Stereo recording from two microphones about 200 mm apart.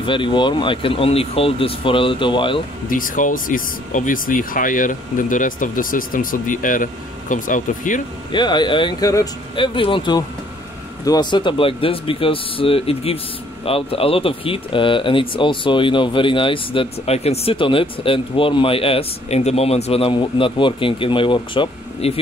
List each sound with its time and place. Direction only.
0.0 s speech: 25° left (ahead or behind)
2.9 s speech: 40° left (ahead or behind)
8.3 s speech: 20° left (ahead or behind)